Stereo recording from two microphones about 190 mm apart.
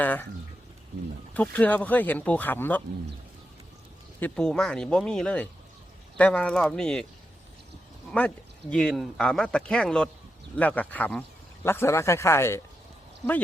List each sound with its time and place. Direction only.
0.0 s speech: 10° left (ahead or behind)
1.3 s speech: 10° left (ahead or behind)
4.2 s speech: 5° left (ahead or behind)
8.1 s speech: 5° left (ahead or behind)